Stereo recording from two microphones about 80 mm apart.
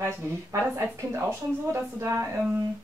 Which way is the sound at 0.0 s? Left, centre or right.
Right.